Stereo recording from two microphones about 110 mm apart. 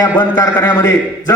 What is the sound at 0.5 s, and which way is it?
Speech, 20° left (ahead or behind).